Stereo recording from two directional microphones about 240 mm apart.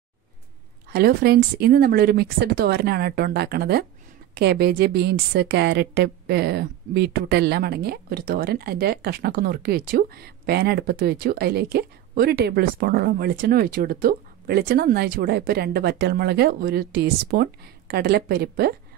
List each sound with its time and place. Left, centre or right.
0.9 s a woman's voice: right